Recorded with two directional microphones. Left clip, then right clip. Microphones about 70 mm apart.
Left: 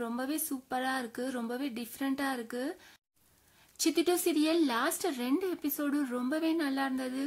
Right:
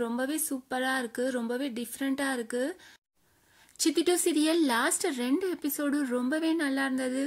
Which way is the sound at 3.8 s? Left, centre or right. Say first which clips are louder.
Right 3 dB; right.